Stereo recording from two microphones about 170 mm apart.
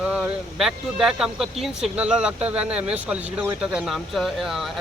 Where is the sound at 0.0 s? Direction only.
5° right (ahead or behind).